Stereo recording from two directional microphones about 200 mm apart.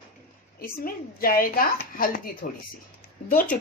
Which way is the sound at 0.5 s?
45° left (ahead or behind).